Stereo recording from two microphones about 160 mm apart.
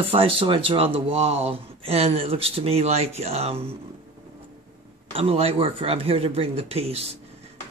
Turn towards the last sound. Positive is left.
turn(degrees=-40)  # may be behind; listen again after turning